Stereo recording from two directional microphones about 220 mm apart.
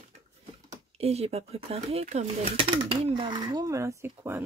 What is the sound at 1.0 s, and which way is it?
Speech, 30° right (ahead or behind).